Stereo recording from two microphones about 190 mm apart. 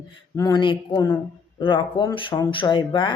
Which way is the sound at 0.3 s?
20° left (ahead or behind).